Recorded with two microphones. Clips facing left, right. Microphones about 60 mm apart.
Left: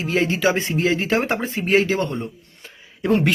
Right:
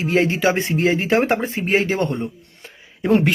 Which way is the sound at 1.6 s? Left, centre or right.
Right.